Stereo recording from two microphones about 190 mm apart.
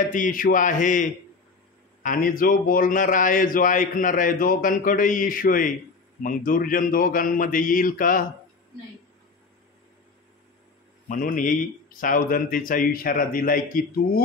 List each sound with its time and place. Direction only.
0.0 s a man's voice: 45° left (ahead or behind)
11.1 s a man's voice: 45° left (ahead or behind)